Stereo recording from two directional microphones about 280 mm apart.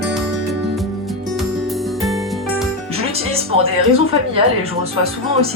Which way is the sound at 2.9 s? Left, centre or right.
Right.